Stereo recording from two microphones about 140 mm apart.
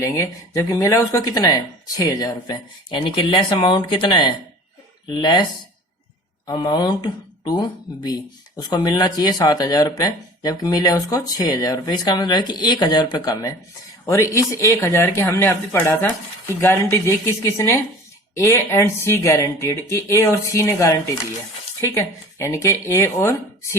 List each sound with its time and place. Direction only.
0.0 s speech: 20° left (ahead or behind)
6.5 s speech: 30° left (ahead or behind)